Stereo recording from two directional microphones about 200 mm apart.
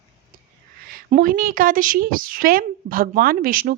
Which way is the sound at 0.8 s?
45° right (ahead or behind).